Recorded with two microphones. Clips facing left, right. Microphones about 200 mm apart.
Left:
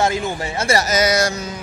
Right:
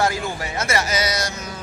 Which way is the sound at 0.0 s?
25° left (ahead or behind).